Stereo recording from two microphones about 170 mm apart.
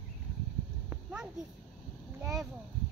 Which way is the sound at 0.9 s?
5° right (ahead or behind).